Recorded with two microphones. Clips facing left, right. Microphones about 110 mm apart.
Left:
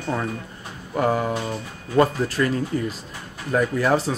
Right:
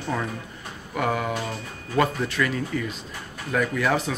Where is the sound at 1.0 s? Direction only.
35° left (ahead or behind).